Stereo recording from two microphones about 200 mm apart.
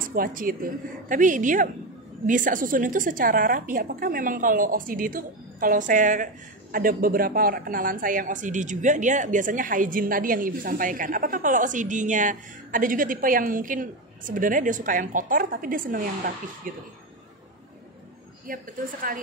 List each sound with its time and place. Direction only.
0.0 s a woman's voice: 45° right (ahead or behind)
18.5 s a woman's voice: 45° right (ahead or behind)